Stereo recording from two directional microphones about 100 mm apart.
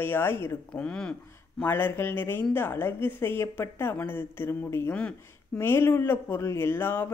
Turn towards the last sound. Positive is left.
turn(degrees=25)  # may be behind; listen again after turning